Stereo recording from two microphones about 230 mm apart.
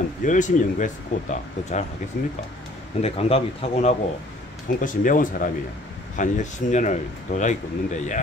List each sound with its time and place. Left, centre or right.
0.2 s speech: left
3.0 s speech: left